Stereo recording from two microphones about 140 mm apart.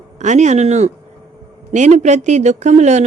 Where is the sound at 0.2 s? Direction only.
55° right (ahead or behind).